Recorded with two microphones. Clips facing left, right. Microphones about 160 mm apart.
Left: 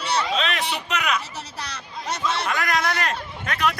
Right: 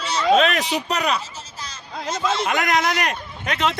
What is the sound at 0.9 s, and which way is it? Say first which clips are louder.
Speech: right 2 dB; 35° right (ahead or behind).